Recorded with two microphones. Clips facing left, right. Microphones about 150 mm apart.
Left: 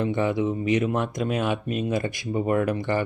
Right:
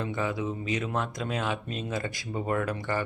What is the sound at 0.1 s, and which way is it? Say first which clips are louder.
Speech: left 7 dB; 25° left (ahead or behind).